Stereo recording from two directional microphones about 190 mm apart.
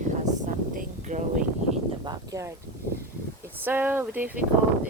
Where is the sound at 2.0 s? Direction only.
20° right (ahead or behind).